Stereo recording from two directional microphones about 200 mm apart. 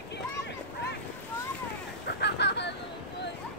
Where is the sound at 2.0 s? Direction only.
55° left (ahead or behind).